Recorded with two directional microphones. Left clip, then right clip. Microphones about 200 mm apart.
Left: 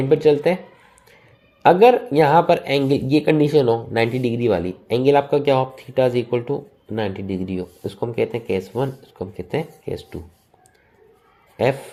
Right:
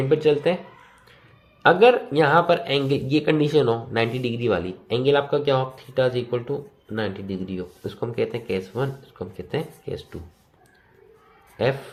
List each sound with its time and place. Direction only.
0.1 s speech: 20° left (ahead or behind)
1.6 s speech: 25° left (ahead or behind)
11.5 s speech: 20° left (ahead or behind)